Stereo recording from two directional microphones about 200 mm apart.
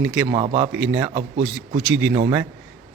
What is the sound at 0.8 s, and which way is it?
A man's voice, 10° right (ahead or behind).